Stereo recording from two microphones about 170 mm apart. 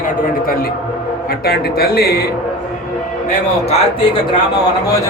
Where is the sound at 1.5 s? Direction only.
65° left (ahead or behind).